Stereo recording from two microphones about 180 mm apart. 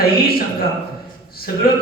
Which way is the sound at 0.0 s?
55° left (ahead or behind).